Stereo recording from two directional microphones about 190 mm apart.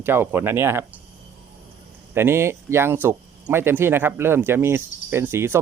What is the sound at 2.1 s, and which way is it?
Speech, 15° right (ahead or behind).